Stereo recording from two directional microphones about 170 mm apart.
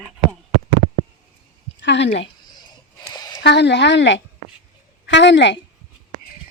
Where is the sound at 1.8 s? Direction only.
90° left.